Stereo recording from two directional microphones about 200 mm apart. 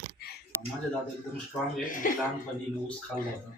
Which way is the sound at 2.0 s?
45° left (ahead or behind).